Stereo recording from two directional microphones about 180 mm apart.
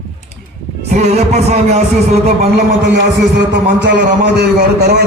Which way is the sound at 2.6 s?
65° right (ahead or behind).